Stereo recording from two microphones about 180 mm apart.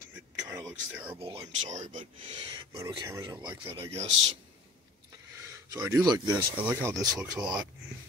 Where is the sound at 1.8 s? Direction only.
45° right (ahead or behind).